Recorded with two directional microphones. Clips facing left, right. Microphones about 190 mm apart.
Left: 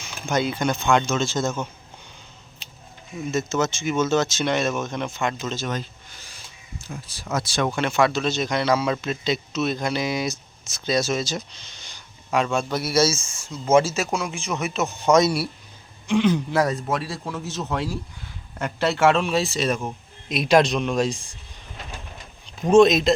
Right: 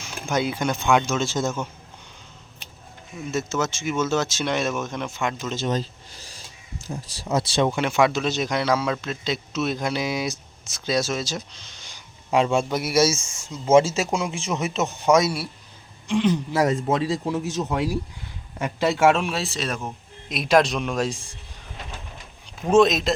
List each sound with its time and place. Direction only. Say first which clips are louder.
0.0 s speech: left 1 dB; 10° right (ahead or behind)
3.3 s speech: left 2 dB; 5° right (ahead or behind)
5.5 s a sound: right 3 dB; 35° right (ahead or behind)
6.9 s speech: right 3 dB; 30° right (ahead or behind)
7.8 s a man's voice: even; 10° right (ahead or behind)
12.3 s speech: right 2 dB; 25° right (ahead or behind)
15.0 s speech: left 1 dB; 10° right (ahead or behind)
16.0 s a man's voice: left 1 dB; centre (ahead or behind)
16.6 s a man's voice: right 2 dB; 25° right (ahead or behind); by 21.2 s 5° right (ahead or behind)
22.4 s speech: left 3 dB; 5° right (ahead or behind)